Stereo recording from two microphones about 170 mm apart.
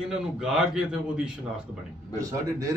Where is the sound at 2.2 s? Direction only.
20° right (ahead or behind).